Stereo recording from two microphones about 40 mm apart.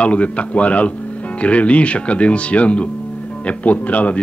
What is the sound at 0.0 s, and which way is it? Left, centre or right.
Speech, left.